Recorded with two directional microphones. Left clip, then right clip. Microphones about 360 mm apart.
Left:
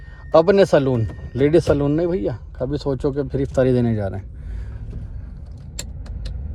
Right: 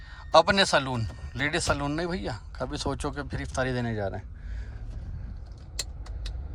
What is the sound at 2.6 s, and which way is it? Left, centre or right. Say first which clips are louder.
Speech: left 10 dB; right.